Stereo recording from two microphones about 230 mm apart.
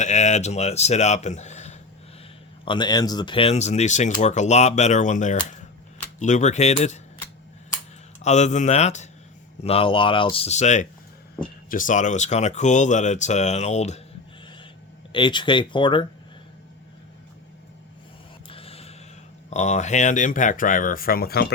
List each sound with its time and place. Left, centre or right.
0.0 s speech: left
2.6 s speech: centre
8.2 s speech: left
15.1 s speech: left
18.4 s a sound: left
19.5 s speech: left